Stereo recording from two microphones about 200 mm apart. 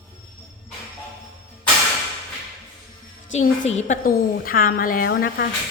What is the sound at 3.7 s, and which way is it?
A woman's voice, 35° left (ahead or behind).